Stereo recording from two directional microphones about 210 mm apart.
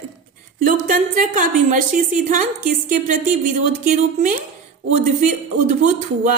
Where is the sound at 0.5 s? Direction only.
40° right (ahead or behind).